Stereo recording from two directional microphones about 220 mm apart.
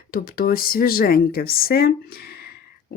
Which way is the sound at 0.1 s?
40° left (ahead or behind).